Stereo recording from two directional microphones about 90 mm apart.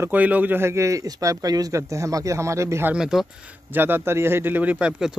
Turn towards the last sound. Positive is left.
turn(degrees=-10)  # may be behind; listen again after turning